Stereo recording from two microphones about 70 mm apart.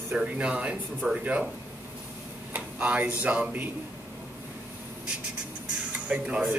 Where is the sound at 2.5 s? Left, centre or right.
Right.